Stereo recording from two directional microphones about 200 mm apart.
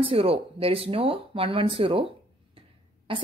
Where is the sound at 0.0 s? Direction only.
30° right (ahead or behind).